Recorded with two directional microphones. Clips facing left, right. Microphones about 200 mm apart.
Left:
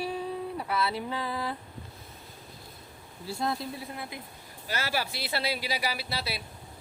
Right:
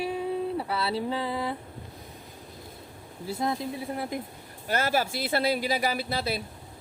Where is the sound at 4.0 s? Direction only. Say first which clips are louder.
Right 8 dB; 45° right (ahead or behind).